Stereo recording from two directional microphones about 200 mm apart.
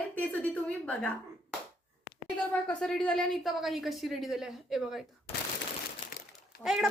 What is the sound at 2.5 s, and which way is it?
A woman's voice, 5° left (ahead or behind).